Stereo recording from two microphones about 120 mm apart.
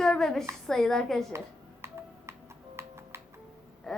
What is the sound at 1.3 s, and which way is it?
Music, 20° right (ahead or behind).